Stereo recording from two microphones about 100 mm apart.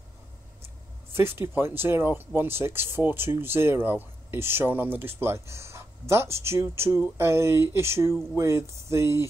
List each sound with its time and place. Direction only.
1.1 s speech: 25° right (ahead or behind)